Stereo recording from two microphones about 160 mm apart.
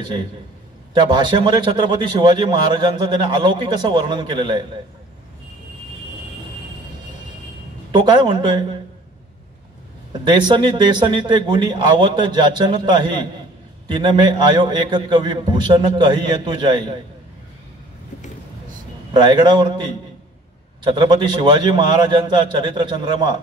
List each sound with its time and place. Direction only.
0.9 s a man's voice: 30° right (ahead or behind)
7.9 s a man's voice: 30° right (ahead or behind)
10.1 s a man's voice: 30° right (ahead or behind)
19.1 s a man's voice: 30° right (ahead or behind)
20.8 s a man's voice: 30° right (ahead or behind)